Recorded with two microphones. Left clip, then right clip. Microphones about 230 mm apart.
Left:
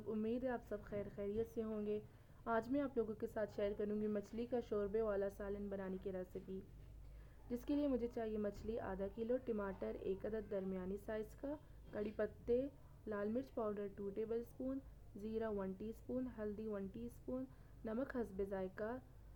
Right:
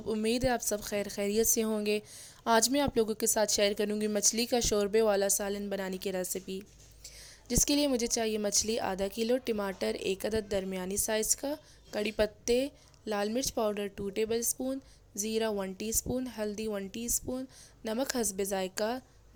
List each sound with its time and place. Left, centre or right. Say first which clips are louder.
0.1 s a woman's voice: right 13 dB; right
7.4 s a woman's voice: right 13 dB; right